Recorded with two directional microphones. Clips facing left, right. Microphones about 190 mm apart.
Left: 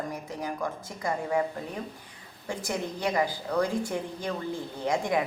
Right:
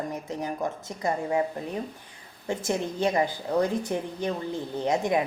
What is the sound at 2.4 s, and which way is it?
A woman's voice, 25° right (ahead or behind).